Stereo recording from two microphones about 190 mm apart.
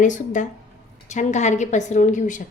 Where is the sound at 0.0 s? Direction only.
40° left (ahead or behind).